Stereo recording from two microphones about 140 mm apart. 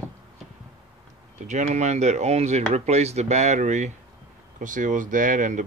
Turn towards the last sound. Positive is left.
turn(degrees=-65)  # may be behind; listen again after turning